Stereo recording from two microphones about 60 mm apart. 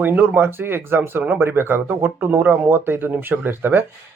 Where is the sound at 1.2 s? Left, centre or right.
Right.